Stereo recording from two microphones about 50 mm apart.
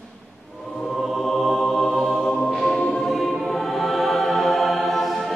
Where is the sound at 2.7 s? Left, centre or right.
Centre.